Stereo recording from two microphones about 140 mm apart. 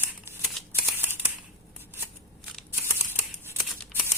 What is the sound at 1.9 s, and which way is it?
Scissors, 15° right (ahead or behind).